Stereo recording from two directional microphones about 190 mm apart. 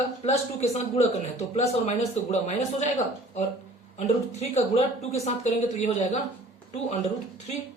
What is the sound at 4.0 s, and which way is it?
Speech, 35° left (ahead or behind).